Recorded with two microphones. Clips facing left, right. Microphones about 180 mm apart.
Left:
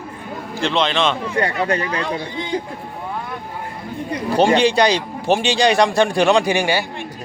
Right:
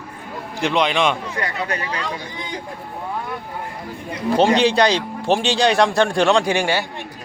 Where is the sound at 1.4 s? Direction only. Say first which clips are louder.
Left 6 dB; 30° left (ahead or behind).